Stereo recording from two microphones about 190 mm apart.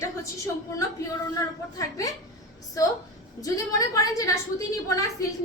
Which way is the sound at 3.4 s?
15° left (ahead or behind).